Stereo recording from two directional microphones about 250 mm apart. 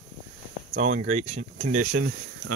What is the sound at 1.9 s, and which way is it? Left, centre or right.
Speech, right.